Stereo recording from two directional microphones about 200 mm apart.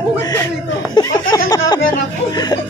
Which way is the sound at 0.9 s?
20° left (ahead or behind).